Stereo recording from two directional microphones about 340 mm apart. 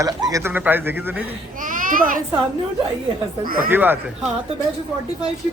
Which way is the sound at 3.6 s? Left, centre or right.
Centre.